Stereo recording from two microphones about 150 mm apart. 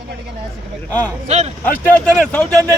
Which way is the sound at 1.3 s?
50° right (ahead or behind).